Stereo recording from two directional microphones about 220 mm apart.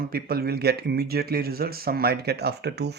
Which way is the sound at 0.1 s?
45° right (ahead or behind).